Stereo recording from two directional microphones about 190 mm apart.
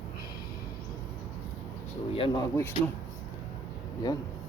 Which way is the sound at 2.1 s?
30° left (ahead or behind).